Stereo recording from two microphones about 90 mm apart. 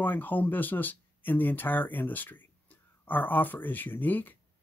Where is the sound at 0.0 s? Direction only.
20° left (ahead or behind).